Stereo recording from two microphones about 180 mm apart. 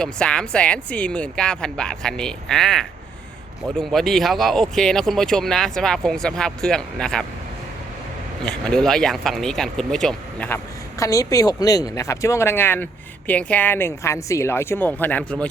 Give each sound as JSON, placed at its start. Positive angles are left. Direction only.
{"t": 0.0, "sound": "speech", "side_deg": 5}
{"t": 8.4, "sound": "speech", "side_deg": 5}
{"t": 11.0, "sound": "speech", "side_deg": 15}